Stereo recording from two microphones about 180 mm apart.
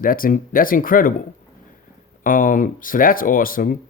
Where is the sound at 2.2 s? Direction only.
50° left (ahead or behind).